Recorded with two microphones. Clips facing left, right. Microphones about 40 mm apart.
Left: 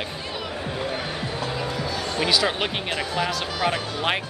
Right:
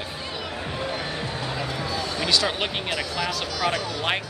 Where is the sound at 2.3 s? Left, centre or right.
Centre.